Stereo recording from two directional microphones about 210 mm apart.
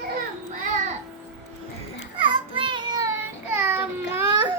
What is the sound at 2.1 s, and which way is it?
Child singing, 25° right (ahead or behind).